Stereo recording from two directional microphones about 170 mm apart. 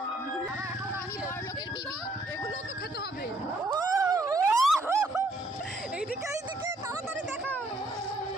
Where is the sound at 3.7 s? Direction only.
20° right (ahead or behind).